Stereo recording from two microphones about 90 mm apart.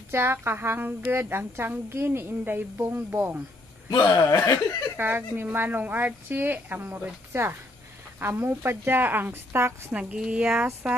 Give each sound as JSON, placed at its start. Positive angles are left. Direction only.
{"t": 0.1, "sound": "speech", "side_deg": -25}
{"t": 4.3, "sound": "speech", "side_deg": 35}
{"t": 4.9, "sound": "speech", "side_deg": -25}
{"t": 9.9, "sound": "speech", "side_deg": -10}